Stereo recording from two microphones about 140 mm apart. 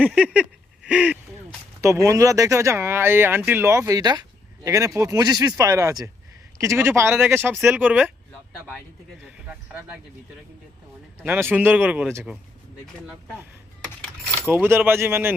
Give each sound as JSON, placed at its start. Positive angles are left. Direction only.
{"t": 0.0, "sound": "a sound", "side_deg": -10}
{"t": 1.8, "sound": "speech", "side_deg": -20}
{"t": 11.2, "sound": "speech", "side_deg": -15}
{"t": 14.3, "sound": "speech", "side_deg": -15}